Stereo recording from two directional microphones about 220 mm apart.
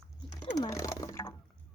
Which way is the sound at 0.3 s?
15° left (ahead or behind).